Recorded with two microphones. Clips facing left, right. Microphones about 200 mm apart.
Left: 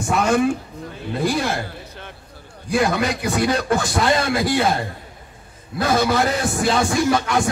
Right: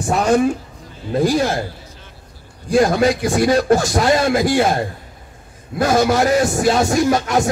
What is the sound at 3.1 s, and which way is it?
Speech, 60° left (ahead or behind).